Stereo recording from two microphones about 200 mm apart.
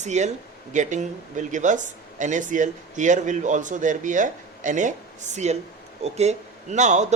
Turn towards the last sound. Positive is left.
turn(degrees=-35)  # may be behind; listen again after turning